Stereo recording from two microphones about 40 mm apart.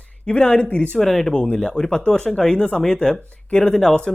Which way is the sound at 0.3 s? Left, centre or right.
Left.